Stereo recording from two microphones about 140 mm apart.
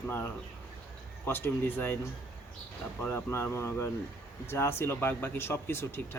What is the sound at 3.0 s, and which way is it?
Speech, 15° left (ahead or behind).